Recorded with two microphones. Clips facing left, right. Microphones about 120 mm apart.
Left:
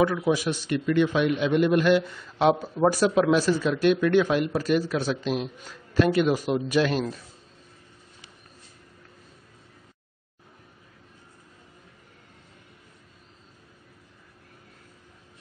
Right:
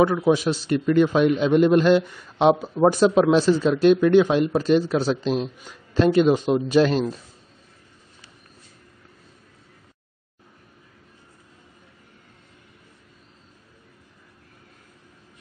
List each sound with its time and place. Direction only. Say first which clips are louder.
0.0 s speech: right 4 dB; 25° right (ahead or behind)
0.7 s a man's voice: right 4 dB; 40° right (ahead or behind)
2.0 s speech: right 4 dB; 20° right (ahead or behind)